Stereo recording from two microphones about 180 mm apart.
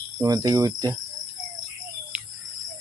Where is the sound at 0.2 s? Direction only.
20° right (ahead or behind).